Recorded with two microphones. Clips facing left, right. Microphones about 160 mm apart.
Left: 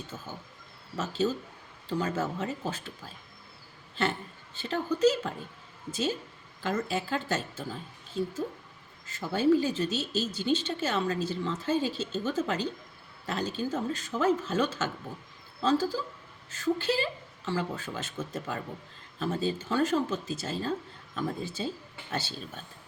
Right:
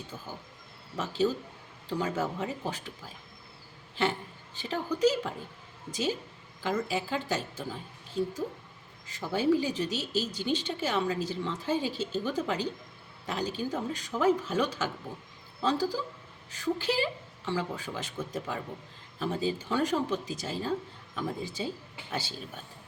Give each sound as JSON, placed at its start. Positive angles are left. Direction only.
{"t": 0.9, "sound": "speech", "side_deg": -15}
{"t": 4.5, "sound": "speech", "side_deg": -15}